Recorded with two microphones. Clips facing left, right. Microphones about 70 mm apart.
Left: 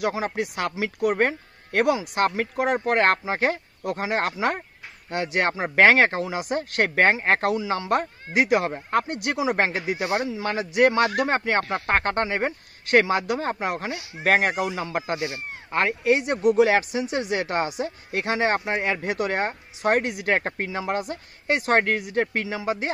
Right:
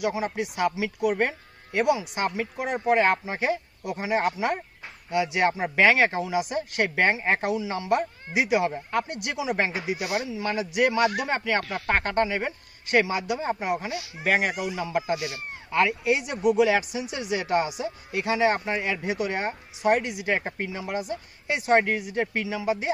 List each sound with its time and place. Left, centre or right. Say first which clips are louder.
0.1 s speech: left 2 dB; left
5.1 s speech: right 1 dB; left
9.9 s speech: left 3 dB; left
10.2 s speech: left 2 dB; left
11.7 s speech: left 2 dB; left
12.0 s speech: left 1 dB; left
15.1 s speech: left 3 dB; left